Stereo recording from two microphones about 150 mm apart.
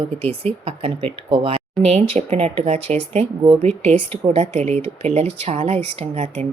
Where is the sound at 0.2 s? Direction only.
40° right (ahead or behind).